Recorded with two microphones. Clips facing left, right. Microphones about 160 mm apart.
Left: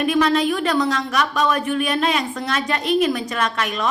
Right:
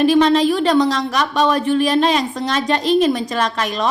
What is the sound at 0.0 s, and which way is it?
A woman's voice, 30° right (ahead or behind).